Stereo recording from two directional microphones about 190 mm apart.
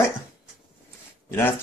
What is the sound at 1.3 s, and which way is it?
Speech, 10° left (ahead or behind).